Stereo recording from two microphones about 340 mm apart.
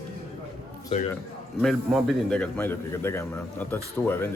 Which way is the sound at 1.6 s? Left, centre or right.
Centre.